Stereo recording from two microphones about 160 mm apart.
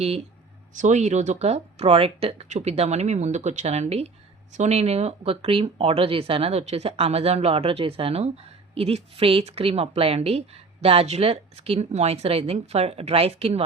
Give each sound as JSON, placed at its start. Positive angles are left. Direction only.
{"t": 0.8, "sound": "speech", "side_deg": -50}